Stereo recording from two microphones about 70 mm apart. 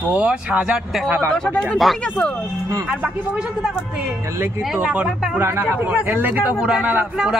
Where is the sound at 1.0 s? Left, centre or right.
Right.